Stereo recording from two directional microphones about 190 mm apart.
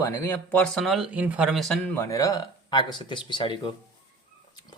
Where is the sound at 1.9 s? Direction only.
15° left (ahead or behind).